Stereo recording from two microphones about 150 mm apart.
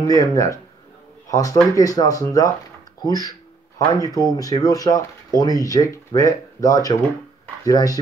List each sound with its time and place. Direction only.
0.0 s speech: 25° left (ahead or behind)
3.0 s a sound: 25° left (ahead or behind)
4.4 s speech: 25° left (ahead or behind)